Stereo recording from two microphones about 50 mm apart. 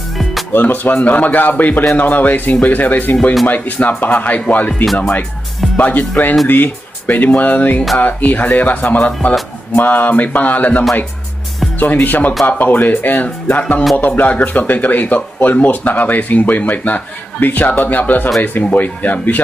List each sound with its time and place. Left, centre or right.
0.5 s speech: left
9.7 s speech: left